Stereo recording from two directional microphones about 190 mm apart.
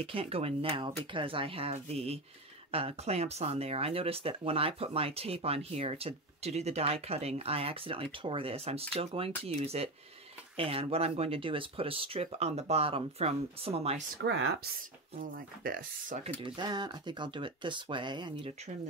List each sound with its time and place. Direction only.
0.0 s speech: 30° right (ahead or behind)
14.2 s speech: 70° right (ahead or behind)
15.1 s speech: 50° right (ahead or behind)
16.4 s speech: 25° right (ahead or behind)